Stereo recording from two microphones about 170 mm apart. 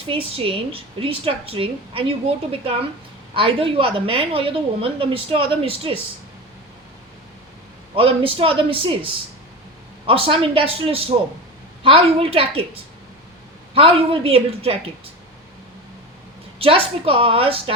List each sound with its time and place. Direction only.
0.0 s a woman's voice: 35° right (ahead or behind)
7.9 s a woman's voice: 35° right (ahead or behind)
13.7 s a woman's voice: 35° right (ahead or behind)
16.6 s a woman's voice: 35° right (ahead or behind)